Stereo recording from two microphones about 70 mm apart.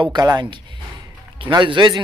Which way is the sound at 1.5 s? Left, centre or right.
Right.